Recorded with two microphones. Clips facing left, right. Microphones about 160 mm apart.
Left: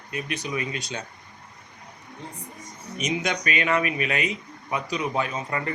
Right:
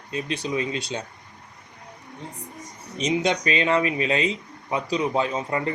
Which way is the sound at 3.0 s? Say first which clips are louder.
Right 4 dB; 30° right (ahead or behind).